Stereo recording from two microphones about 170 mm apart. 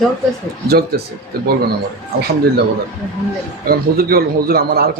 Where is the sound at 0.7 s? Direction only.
65° right (ahead or behind).